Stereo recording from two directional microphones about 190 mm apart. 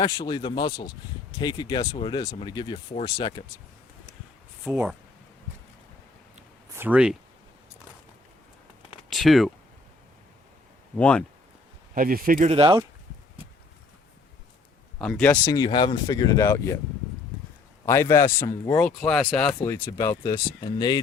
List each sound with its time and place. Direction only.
0.0 s speech: 20° left (ahead or behind)
4.6 s speech: 5° right (ahead or behind)
6.7 s speech: 10° right (ahead or behind)
9.0 s speech: centre (ahead or behind)
10.9 s speech: 5° left (ahead or behind)
11.9 s speech: 50° right (ahead or behind)
12.5 s speech: 25° right (ahead or behind)
15.0 s speech: 5° left (ahead or behind)
15.5 s speech: 20° left (ahead or behind)
17.8 s speech: 15° left (ahead or behind)
18.8 s speech: 5° left (ahead or behind); by 21.0 s 20° left (ahead or behind)